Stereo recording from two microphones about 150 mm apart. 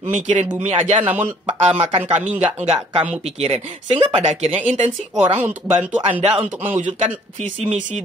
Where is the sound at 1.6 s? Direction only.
45° right (ahead or behind).